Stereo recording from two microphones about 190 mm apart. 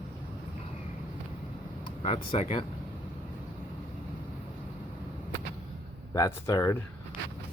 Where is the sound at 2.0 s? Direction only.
35° left (ahead or behind).